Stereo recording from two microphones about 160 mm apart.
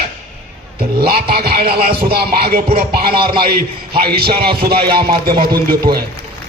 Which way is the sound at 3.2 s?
30° right (ahead or behind).